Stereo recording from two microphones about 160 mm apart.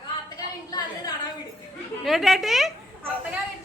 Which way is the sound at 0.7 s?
20° left (ahead or behind).